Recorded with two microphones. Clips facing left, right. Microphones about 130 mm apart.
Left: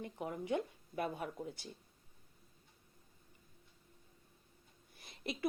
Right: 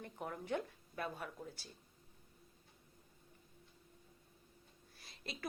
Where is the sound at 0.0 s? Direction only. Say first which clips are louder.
Left 4 dB; 15° left (ahead or behind).